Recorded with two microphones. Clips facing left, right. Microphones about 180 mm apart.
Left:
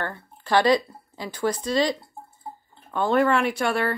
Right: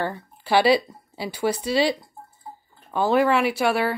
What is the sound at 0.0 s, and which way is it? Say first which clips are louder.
Speech: right 4 dB; 10° right (ahead or behind).